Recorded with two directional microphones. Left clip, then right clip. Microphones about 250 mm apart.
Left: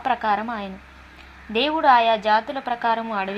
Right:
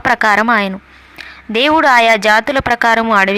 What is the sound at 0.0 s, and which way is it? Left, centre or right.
Speech, right.